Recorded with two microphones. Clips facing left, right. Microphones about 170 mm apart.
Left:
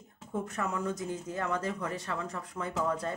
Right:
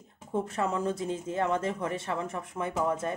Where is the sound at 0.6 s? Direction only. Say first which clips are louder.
Right 4 dB; 30° right (ahead or behind).